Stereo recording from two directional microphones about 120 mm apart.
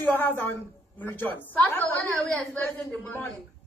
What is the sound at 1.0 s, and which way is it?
A woman's voice, 15° left (ahead or behind).